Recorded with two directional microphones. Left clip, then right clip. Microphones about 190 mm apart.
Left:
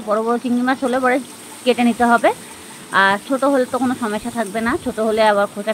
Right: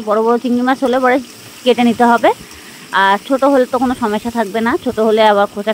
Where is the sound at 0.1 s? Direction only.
50° right (ahead or behind).